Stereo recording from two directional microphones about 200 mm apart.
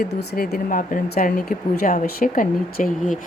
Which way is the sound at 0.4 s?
45° left (ahead or behind).